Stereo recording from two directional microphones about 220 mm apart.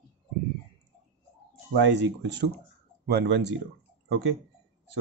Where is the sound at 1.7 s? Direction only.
55° right (ahead or behind).